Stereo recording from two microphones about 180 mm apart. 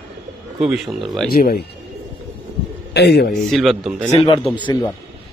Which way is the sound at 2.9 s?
65° left (ahead or behind).